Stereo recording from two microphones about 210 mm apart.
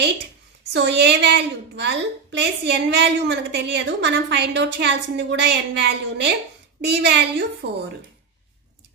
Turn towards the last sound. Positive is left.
turn(degrees=-55)  # may be behind; listen again after turning